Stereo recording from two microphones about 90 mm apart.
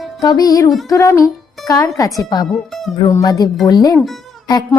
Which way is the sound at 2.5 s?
Centre (ahead or behind).